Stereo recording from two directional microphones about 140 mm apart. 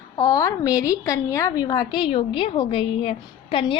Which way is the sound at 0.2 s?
25° left (ahead or behind).